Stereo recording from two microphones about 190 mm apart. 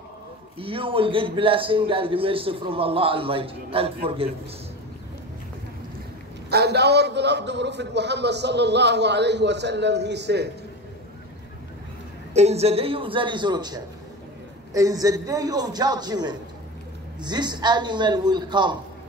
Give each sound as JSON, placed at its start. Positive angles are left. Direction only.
{"t": 0.6, "sound": "a man's voice", "side_deg": -30}
{"t": 6.5, "sound": "a man's voice", "side_deg": -60}
{"t": 12.4, "sound": "a man's voice", "side_deg": -35}